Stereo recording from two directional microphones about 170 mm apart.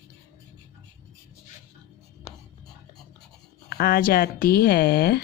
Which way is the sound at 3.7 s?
65° left (ahead or behind).